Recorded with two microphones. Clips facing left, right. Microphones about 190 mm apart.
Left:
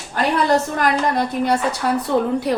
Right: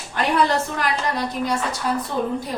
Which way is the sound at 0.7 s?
50° left (ahead or behind).